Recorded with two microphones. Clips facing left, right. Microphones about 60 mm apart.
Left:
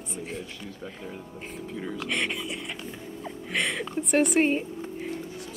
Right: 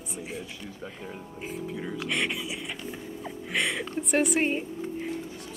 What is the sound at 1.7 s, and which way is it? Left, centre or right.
Speech, centre.